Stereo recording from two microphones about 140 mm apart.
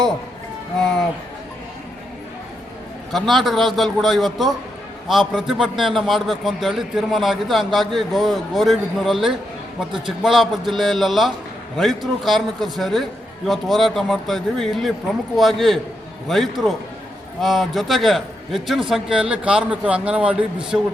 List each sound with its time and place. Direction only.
3.1 s a man's voice: centre (ahead or behind)